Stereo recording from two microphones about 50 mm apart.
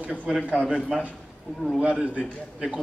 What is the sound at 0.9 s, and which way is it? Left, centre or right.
Speech, centre.